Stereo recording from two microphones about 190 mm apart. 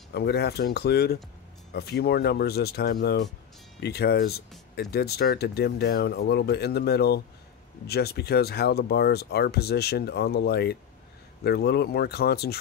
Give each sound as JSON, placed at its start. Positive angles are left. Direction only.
{"t": 0.1, "sound": "speech", "side_deg": 60}